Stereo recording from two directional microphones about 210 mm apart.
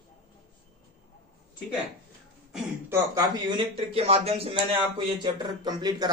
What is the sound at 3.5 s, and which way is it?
A man's voice, 25° right (ahead or behind).